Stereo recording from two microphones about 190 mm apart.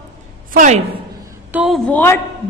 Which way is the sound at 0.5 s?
40° right (ahead or behind).